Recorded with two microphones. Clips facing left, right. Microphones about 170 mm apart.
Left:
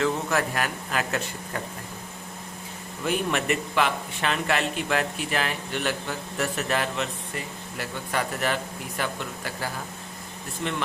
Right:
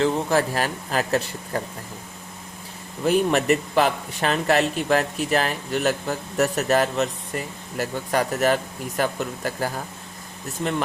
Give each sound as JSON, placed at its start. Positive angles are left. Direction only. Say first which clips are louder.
{"t": 0.0, "sound": "speech", "louder": "right 4 dB", "side_deg": -30}
{"t": 3.0, "sound": "speech", "louder": "right 7 dB", "side_deg": -40}